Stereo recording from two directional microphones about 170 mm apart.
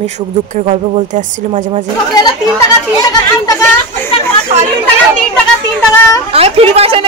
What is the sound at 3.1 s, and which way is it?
Speech, 20° left (ahead or behind).